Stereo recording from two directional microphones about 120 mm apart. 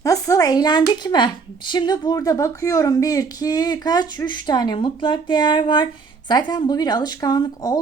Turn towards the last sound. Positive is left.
turn(degrees=30)  # may be behind; listen again after turning